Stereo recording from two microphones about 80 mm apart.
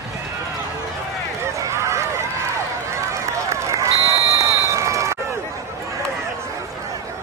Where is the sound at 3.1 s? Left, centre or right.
Right.